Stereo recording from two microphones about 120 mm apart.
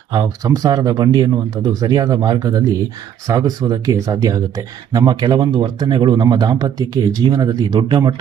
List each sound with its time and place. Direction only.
0.1 s speech: 35° right (ahead or behind)